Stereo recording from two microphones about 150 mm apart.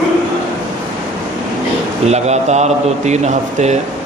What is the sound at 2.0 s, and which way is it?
A man's voice, 45° right (ahead or behind).